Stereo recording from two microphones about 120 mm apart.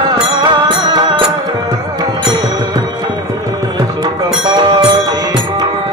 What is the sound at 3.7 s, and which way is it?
Music, 40° right (ahead or behind).